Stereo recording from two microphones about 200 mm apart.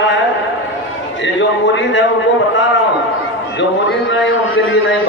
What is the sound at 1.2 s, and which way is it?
Speech, 65° left (ahead or behind).